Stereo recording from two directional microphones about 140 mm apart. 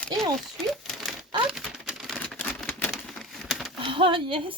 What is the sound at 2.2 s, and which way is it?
Typewriter, 10° left (ahead or behind).